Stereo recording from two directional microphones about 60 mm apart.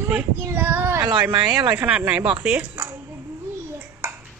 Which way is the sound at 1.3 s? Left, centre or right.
Centre.